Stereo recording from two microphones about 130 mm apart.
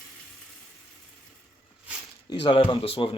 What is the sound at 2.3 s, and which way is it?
Speech, 40° left (ahead or behind).